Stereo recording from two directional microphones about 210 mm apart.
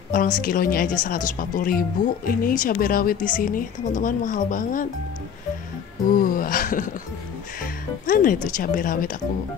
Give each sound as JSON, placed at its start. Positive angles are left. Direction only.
{"t": 0.1, "sound": "speech", "side_deg": 40}
{"t": 6.0, "sound": "speech", "side_deg": 40}